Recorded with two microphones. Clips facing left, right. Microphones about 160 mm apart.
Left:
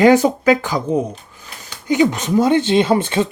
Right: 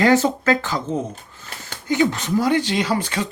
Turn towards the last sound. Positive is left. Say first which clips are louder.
# left 7 dB
turn(degrees=25)  # may be behind; listen again after turning